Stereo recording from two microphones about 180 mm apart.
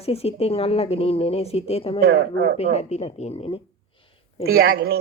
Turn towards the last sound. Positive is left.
turn(degrees=-55)  # may be behind; listen again after turning